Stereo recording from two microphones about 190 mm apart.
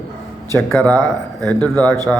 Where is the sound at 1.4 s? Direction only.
5° left (ahead or behind).